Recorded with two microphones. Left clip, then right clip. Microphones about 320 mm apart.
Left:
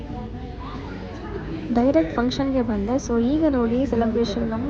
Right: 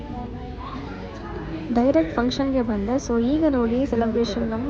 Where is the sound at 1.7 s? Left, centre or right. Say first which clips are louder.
Even; centre.